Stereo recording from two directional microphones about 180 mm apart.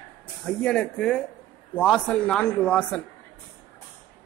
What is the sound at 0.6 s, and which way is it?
Speech, 5° left (ahead or behind).